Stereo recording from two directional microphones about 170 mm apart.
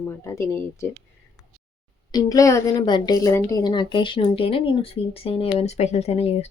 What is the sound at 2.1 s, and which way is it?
A woman's voice, 20° left (ahead or behind).